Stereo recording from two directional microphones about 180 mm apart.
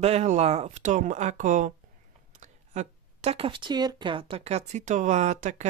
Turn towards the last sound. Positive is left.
turn(degrees=-40)  # may be behind; listen again after turning